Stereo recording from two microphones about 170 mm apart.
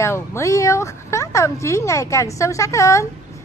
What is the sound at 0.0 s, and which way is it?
Speech, 15° left (ahead or behind).